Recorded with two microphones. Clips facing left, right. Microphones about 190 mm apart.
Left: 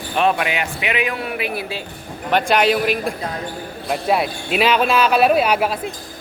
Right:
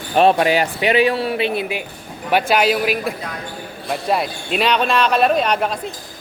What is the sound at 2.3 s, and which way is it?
Speech, 5° right (ahead or behind).